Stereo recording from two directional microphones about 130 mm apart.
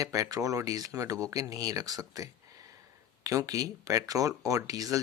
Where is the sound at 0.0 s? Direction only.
25° right (ahead or behind).